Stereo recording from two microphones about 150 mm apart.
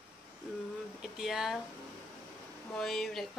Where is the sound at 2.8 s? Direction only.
Centre (ahead or behind).